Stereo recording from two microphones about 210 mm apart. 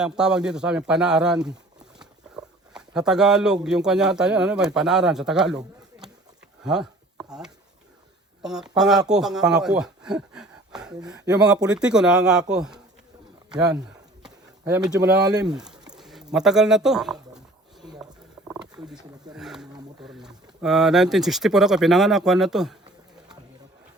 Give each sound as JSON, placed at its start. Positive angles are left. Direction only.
{"t": 0.0, "sound": "speech", "side_deg": -5}
{"t": 15.2, "sound": "speech", "side_deg": -20}
{"t": 15.4, "sound": "a sound", "side_deg": -5}
{"t": 16.0, "sound": "speech", "side_deg": 0}
{"t": 18.0, "sound": "a sound", "side_deg": -5}
{"t": 20.1, "sound": "speech", "side_deg": 0}